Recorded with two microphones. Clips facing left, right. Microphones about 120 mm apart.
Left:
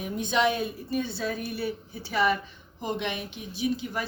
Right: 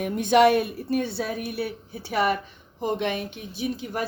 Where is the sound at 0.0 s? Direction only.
65° right (ahead or behind).